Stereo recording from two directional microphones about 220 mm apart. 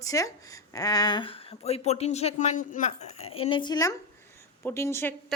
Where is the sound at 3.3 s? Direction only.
25° left (ahead or behind).